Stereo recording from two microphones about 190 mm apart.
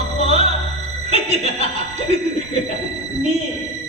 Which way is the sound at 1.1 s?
35° right (ahead or behind).